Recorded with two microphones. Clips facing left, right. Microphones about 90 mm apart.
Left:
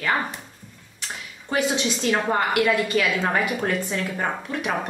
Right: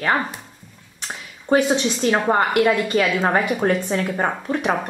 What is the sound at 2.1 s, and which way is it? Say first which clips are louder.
A woman's voice: right 4 dB; 30° right (ahead or behind).